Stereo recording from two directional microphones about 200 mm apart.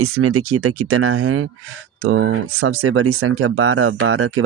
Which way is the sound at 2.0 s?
75° right (ahead or behind).